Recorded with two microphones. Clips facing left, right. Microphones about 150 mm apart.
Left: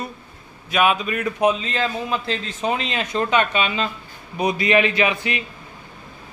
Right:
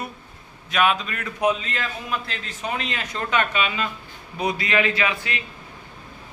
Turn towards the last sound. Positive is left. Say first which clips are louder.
# left 4 dB
turn(degrees=20)  # may be behind; listen again after turning